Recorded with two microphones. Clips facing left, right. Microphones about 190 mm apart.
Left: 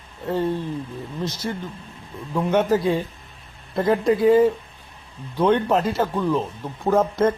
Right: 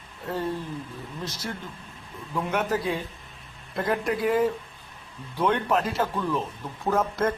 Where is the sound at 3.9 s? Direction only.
25° left (ahead or behind).